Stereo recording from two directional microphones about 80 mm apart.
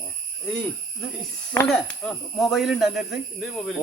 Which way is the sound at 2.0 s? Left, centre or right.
Centre.